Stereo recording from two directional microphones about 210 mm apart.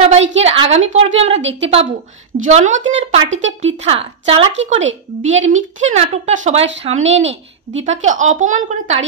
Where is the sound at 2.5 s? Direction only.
35° right (ahead or behind).